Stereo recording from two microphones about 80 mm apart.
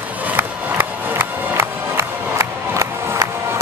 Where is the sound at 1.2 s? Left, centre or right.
Right.